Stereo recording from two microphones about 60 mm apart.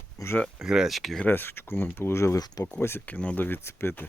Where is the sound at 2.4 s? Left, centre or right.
Left.